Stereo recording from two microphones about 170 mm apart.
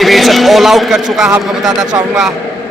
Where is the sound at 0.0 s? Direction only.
Centre (ahead or behind).